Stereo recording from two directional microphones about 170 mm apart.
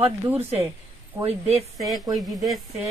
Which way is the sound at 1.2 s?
40° right (ahead or behind).